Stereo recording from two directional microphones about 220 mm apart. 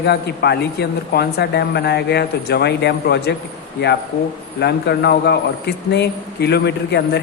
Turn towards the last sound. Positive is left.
turn(degrees=50)  # may be behind; listen again after turning